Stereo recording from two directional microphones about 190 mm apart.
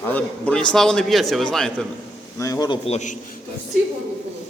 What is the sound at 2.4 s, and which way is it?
Speech, 20° left (ahead or behind).